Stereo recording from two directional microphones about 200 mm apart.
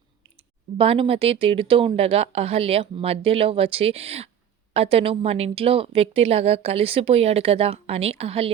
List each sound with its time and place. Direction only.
0.8 s a woman's voice: 30° right (ahead or behind)